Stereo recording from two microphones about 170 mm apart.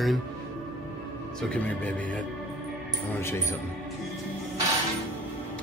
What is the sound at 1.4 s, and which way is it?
Speech, 5° left (ahead or behind).